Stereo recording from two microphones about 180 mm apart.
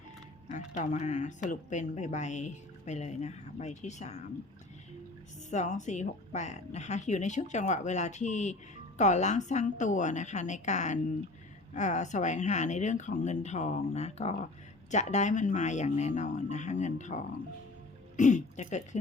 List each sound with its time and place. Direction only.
0.5 s speech: 45° left (ahead or behind)
5.5 s speech: 40° left (ahead or behind)
18.2 s a sound: 45° left (ahead or behind)